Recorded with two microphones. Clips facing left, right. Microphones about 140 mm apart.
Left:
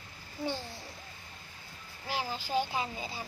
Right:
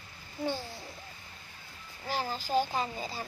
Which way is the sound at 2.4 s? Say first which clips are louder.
Right 3 dB; 40° right (ahead or behind).